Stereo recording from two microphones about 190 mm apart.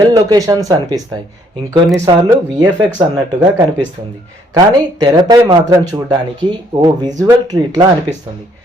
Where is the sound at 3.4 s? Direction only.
20° right (ahead or behind).